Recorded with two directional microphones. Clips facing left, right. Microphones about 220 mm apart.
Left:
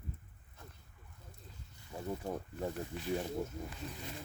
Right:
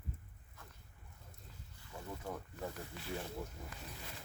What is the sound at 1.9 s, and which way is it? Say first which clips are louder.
Speech: left 6 dB; 25° left (ahead or behind).